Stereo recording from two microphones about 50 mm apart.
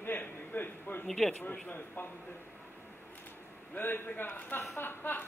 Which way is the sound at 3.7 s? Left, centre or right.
Left.